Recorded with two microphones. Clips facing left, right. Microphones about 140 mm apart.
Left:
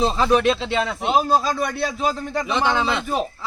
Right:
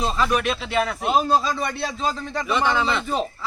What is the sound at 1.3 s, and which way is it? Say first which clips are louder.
A man's voice: left 1 dB; 5° left (ahead or behind).